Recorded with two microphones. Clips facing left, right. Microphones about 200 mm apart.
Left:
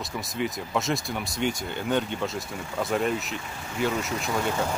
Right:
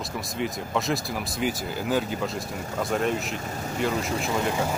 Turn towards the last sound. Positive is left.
turn(degrees=-5)  # may be behind; listen again after turning